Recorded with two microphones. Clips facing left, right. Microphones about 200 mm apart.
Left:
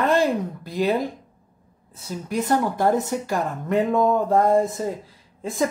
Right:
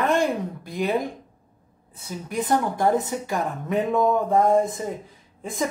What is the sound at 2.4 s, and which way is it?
Speech, 15° right (ahead or behind).